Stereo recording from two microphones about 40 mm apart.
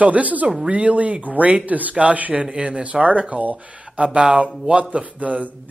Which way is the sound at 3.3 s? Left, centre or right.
Right.